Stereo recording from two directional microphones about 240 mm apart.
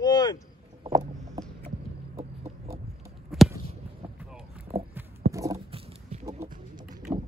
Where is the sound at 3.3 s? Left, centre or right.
Centre.